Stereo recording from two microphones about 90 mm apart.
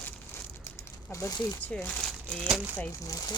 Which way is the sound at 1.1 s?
35° left (ahead or behind).